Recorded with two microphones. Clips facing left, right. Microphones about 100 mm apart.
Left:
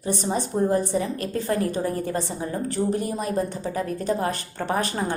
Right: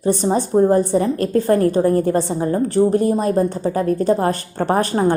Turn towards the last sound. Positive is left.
turn(degrees=-40)  # may be behind; listen again after turning